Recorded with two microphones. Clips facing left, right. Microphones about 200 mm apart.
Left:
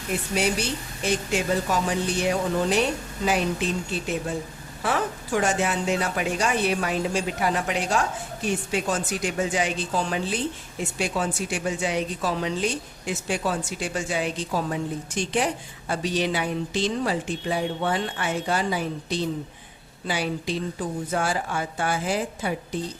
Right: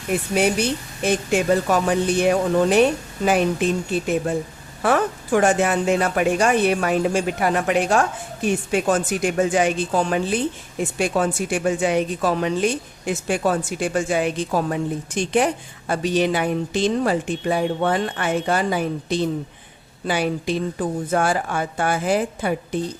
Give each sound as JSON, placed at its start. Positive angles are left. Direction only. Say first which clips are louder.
{"t": 1.0, "sound": "a woman's voice", "louder": "right 6 dB", "side_deg": -55}